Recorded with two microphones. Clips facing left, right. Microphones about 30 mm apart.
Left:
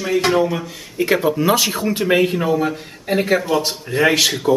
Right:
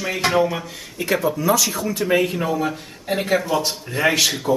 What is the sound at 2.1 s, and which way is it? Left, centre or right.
Speech, left.